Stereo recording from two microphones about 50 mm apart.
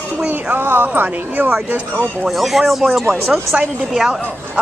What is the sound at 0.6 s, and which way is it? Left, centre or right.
Speech, right.